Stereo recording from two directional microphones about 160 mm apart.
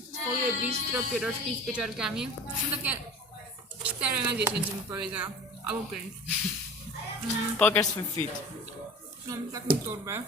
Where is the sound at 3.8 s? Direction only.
10° right (ahead or behind).